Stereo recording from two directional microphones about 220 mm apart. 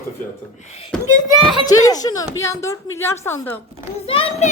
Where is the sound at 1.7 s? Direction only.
15° left (ahead or behind).